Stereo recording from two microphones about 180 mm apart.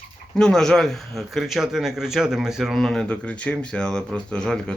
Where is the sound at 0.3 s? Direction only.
5° left (ahead or behind).